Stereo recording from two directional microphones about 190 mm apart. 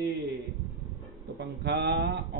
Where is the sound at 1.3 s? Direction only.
65° right (ahead or behind).